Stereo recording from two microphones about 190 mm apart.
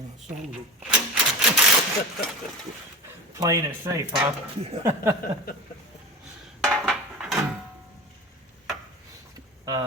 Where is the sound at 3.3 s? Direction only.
20° right (ahead or behind).